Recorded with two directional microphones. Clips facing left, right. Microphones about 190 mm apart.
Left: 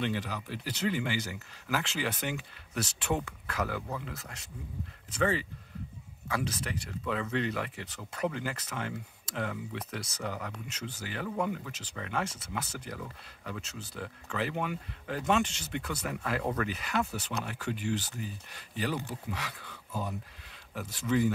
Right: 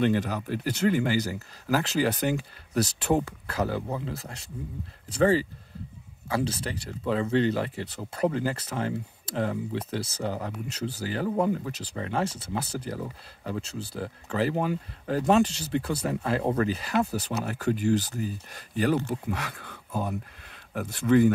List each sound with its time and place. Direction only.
0.0 s speech: 45° right (ahead or behind)